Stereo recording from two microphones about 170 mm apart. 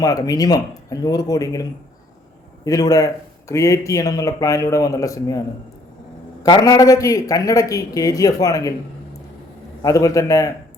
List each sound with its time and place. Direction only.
0.0 s a man's voice: 20° left (ahead or behind)
2.6 s a man's voice: 20° left (ahead or behind)
6.4 s a man's voice: 25° left (ahead or behind)
9.8 s a man's voice: 20° left (ahead or behind)